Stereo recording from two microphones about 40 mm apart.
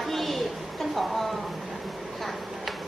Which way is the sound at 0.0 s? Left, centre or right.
Centre.